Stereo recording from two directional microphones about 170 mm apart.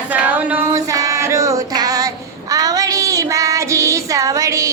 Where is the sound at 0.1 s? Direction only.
10° right (ahead or behind).